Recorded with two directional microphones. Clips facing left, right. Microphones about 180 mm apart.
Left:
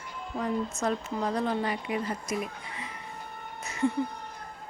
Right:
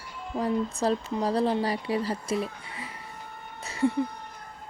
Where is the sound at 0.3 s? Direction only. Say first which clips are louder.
Right 3 dB; 35° right (ahead or behind).